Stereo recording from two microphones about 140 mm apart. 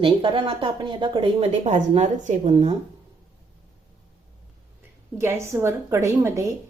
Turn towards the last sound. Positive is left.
turn(degrees=-20)  # may be behind; listen again after turning